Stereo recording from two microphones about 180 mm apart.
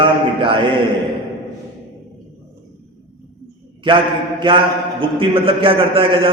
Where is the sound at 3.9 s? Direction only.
25° right (ahead or behind).